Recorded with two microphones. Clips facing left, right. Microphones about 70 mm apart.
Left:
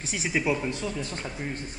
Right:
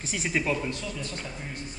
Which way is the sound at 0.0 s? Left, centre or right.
Centre.